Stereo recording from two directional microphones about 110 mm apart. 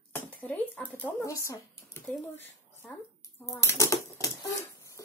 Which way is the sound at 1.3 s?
25° left (ahead or behind).